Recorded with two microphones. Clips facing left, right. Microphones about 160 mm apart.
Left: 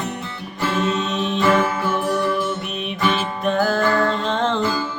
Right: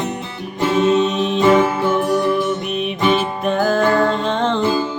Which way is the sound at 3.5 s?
Centre (ahead or behind).